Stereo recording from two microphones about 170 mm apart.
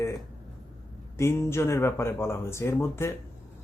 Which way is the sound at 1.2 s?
15° left (ahead or behind).